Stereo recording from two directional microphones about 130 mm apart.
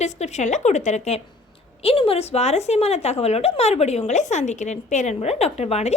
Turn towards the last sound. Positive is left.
turn(degrees=55)  # may be behind; listen again after turning